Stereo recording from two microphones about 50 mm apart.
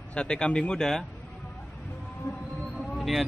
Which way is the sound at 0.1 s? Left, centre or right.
Centre.